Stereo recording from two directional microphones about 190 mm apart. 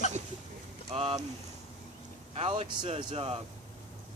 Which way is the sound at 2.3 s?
30° right (ahead or behind).